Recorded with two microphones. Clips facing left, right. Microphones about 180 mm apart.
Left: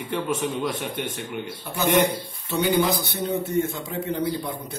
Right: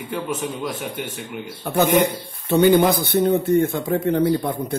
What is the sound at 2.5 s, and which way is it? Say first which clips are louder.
Speech: right 7 dB; 55° right (ahead or behind).